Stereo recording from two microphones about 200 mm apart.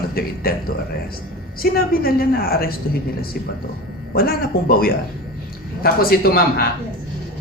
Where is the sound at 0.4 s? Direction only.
50° left (ahead or behind).